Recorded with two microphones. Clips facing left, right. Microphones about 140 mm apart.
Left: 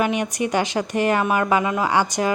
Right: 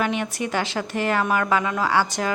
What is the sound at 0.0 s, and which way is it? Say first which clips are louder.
A woman's voice: left 3 dB; 15° left (ahead or behind).